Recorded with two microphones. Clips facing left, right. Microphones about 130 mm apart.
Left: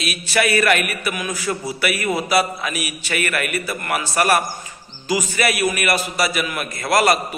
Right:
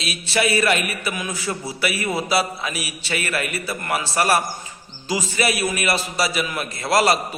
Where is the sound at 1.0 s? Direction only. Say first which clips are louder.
Left 2 dB; 25° right (ahead or behind).